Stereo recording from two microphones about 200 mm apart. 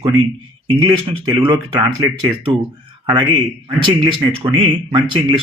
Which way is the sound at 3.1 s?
25° right (ahead or behind).